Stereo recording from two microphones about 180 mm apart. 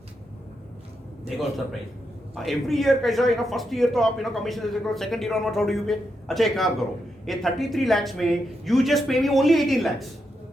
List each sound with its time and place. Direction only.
2.3 s a man's voice: centre (ahead or behind)